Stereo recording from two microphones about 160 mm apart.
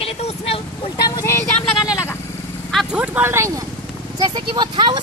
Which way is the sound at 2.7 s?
5° right (ahead or behind).